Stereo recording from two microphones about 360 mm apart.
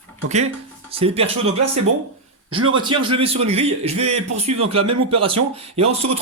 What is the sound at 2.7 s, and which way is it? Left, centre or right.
Speech, centre.